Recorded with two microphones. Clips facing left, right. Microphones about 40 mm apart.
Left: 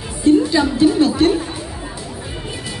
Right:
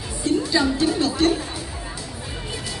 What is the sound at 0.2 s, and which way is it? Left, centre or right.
Music, left.